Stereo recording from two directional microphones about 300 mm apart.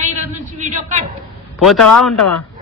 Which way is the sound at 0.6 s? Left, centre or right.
Right.